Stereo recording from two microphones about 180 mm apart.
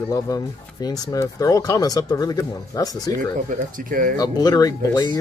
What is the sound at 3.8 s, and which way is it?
Speech, 50° right (ahead or behind).